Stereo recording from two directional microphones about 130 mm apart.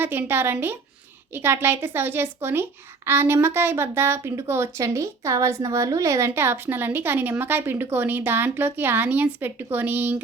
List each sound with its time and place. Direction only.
0.0 s a woman's voice: 15° right (ahead or behind)